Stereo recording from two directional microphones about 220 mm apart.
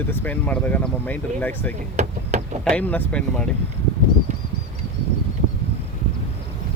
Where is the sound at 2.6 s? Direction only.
5° left (ahead or behind).